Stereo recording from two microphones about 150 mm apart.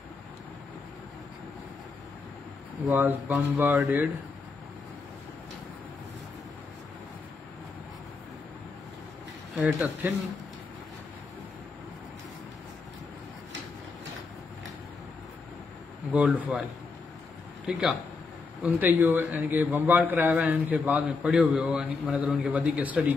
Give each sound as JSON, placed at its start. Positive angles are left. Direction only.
{"t": 2.9, "sound": "a man's voice", "side_deg": -15}
{"t": 9.6, "sound": "a man's voice", "side_deg": -15}
{"t": 16.1, "sound": "a man's voice", "side_deg": -10}
{"t": 17.6, "sound": "a man's voice", "side_deg": -5}